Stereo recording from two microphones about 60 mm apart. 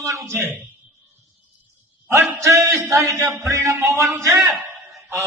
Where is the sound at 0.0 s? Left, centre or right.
Right.